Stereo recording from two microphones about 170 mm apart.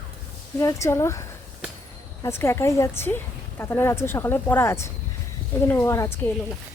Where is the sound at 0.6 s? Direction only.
20° left (ahead or behind).